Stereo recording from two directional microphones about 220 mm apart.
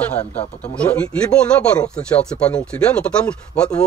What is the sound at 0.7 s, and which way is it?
Speech, 5° left (ahead or behind).